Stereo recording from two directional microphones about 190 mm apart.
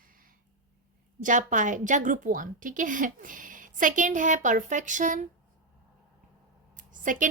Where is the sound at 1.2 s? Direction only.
40° right (ahead or behind).